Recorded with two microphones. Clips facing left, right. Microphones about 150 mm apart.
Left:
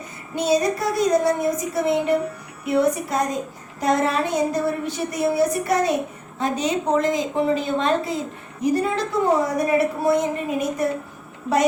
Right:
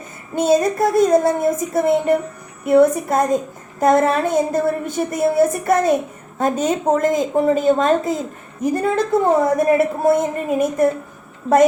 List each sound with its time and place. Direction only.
0.3 s a woman's voice: 50° right (ahead or behind)